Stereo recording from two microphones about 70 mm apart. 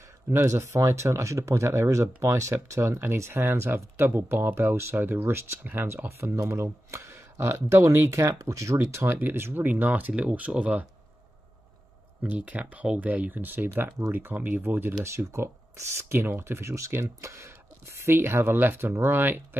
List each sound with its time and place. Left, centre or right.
0.3 s speech: right
8.9 s speech: right
12.2 s speech: centre
15.1 s speech: right